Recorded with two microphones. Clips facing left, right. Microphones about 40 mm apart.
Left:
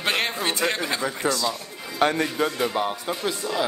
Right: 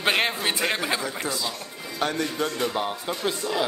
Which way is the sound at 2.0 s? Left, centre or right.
Left.